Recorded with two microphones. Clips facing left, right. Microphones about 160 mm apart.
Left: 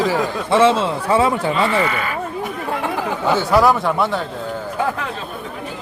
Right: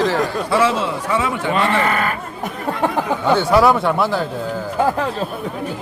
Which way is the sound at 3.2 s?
Centre (ahead or behind).